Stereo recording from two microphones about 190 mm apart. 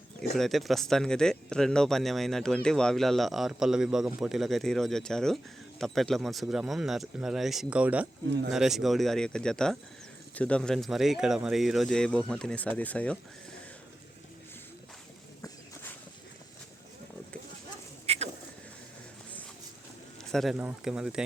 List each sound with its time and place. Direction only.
0.3 s speech: centre (ahead or behind)
18.0 s a sound: 30° right (ahead or behind)
20.3 s speech: centre (ahead or behind)